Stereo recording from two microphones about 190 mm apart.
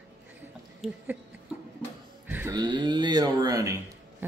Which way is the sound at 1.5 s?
5° right (ahead or behind).